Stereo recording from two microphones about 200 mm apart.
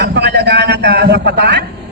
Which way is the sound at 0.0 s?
55° right (ahead or behind).